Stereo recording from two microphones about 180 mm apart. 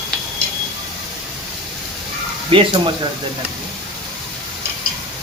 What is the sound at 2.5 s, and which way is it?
Speech, 30° right (ahead or behind).